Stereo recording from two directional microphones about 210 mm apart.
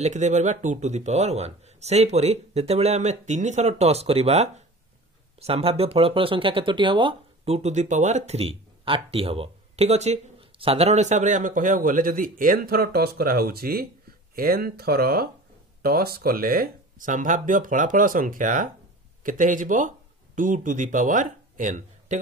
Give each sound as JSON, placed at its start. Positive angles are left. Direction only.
{"t": 0.0, "sound": "speech", "side_deg": -35}